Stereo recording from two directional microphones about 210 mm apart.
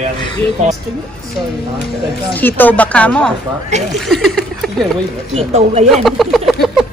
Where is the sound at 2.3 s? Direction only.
10° left (ahead or behind).